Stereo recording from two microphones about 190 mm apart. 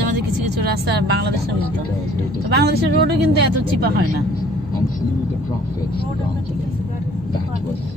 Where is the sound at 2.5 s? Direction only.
60° right (ahead or behind).